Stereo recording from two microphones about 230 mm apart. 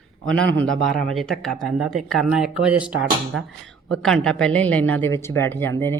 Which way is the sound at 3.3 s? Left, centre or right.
Right.